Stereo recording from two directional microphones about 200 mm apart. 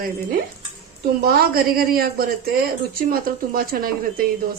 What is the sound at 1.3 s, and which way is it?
A woman's voice, 50° right (ahead or behind).